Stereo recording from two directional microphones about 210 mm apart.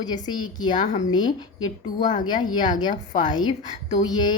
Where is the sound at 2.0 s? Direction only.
40° left (ahead or behind).